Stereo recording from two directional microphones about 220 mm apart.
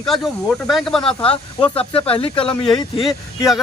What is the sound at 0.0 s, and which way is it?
Speech, centre (ahead or behind).